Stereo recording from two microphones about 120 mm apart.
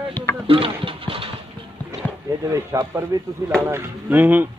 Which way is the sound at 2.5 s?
25° right (ahead or behind).